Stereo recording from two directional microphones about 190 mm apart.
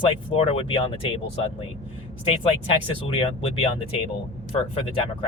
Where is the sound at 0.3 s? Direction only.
30° left (ahead or behind).